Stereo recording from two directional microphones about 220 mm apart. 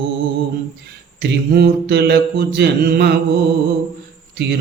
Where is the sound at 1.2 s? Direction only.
50° right (ahead or behind).